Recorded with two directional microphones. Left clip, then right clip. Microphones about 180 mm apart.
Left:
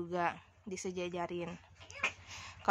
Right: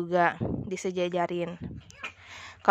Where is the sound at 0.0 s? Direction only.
45° right (ahead or behind).